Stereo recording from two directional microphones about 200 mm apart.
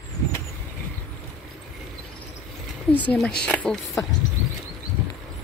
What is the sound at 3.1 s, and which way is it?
Speech, 5° left (ahead or behind).